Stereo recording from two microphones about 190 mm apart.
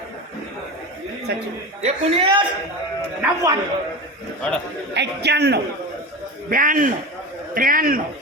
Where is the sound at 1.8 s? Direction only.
30° right (ahead or behind).